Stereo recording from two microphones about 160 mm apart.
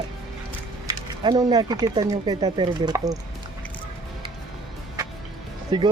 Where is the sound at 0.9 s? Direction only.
25° right (ahead or behind).